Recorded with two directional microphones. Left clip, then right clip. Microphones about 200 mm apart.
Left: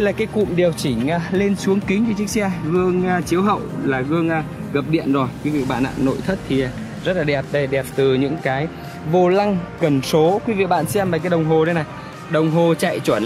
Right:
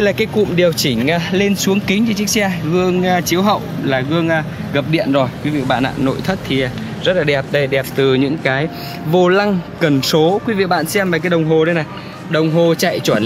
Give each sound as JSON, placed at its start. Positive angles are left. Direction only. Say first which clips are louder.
{"t": 0.0, "sound": "speech", "louder": "right 4 dB", "side_deg": 15}